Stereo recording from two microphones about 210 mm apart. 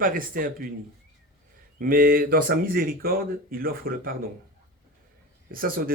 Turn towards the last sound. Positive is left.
turn(degrees=-45)  # may be behind; listen again after turning